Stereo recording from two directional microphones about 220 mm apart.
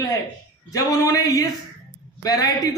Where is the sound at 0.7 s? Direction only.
15° left (ahead or behind).